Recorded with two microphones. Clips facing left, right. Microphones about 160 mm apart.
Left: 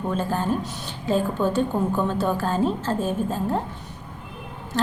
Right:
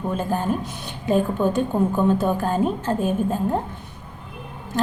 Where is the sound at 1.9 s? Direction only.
15° right (ahead or behind).